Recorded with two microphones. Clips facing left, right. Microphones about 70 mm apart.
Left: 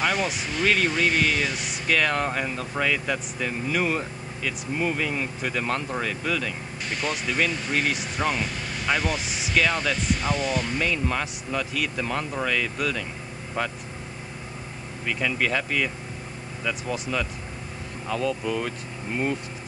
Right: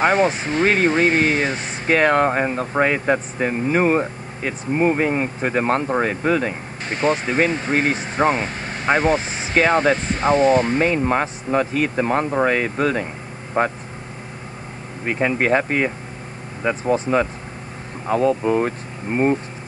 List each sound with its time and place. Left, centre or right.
0.0 s speech: right
15.0 s speech: right